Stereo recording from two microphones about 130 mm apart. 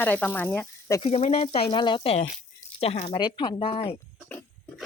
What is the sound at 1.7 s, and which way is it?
Speech, 35° left (ahead or behind).